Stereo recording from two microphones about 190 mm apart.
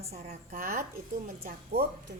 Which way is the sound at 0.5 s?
50° right (ahead or behind).